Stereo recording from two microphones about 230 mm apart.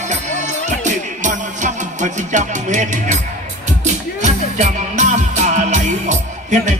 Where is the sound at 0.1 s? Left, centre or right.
Right.